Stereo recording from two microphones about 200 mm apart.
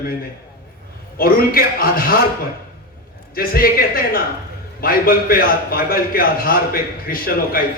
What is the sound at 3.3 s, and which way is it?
A man's voice, 45° left (ahead or behind).